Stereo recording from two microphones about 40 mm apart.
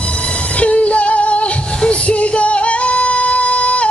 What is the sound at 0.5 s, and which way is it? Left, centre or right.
Female singing, left.